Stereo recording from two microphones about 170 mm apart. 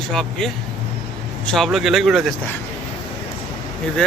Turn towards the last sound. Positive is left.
turn(degrees=5)  # may be behind; listen again after turning